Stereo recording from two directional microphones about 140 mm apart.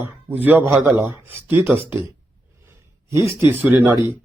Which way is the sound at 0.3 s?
15° right (ahead or behind).